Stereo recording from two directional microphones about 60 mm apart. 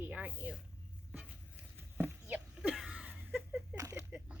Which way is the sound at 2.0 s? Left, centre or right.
Right.